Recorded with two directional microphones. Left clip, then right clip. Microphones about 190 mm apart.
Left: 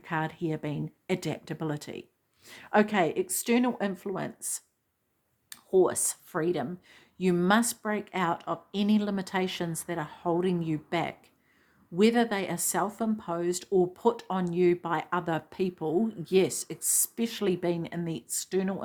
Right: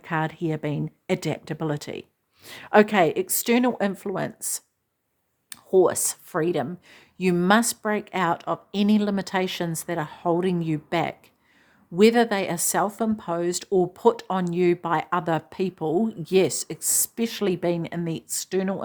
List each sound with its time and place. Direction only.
0.0 s speech: 30° right (ahead or behind)